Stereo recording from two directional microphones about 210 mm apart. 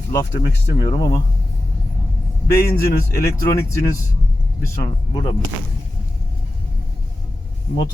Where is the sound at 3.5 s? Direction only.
15° left (ahead or behind).